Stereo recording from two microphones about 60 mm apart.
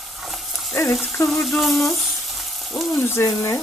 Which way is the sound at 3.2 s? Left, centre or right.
Left.